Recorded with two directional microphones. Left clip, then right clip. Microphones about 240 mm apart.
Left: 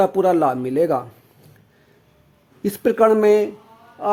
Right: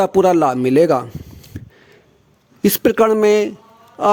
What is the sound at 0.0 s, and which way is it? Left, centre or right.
A man's voice, right.